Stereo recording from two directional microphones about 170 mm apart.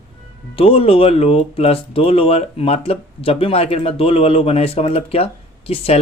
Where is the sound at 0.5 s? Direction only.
35° left (ahead or behind).